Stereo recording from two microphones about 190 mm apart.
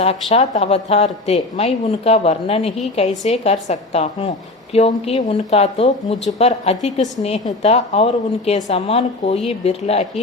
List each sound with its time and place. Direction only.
0.3 s a woman's voice: 35° left (ahead or behind)